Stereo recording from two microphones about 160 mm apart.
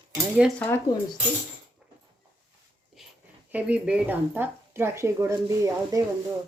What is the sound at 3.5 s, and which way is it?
Speech, 10° right (ahead or behind).